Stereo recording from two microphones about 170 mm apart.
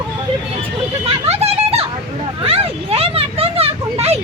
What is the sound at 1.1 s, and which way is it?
Children playing, 40° right (ahead or behind).